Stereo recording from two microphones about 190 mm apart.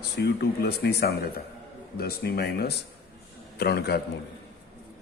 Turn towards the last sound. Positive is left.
turn(degrees=60)  # may be behind; listen again after turning